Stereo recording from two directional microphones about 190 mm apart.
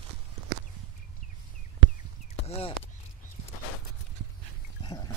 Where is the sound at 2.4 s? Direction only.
30° left (ahead or behind).